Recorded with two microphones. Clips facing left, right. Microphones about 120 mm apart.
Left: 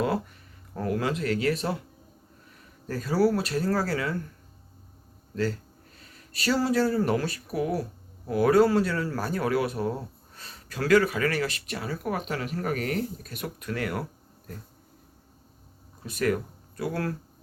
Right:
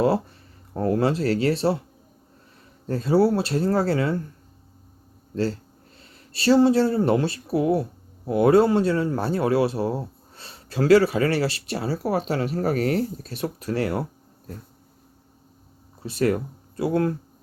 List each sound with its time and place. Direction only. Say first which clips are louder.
0.7 s speech: right 6 dB; 30° right (ahead or behind)
2.8 s speech: right 4 dB; 25° right (ahead or behind)
5.3 s speech: right 3 dB; 30° right (ahead or behind)
16.0 s speech: right 4 dB; 30° right (ahead or behind)